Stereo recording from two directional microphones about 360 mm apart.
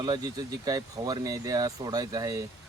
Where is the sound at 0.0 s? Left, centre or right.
Centre.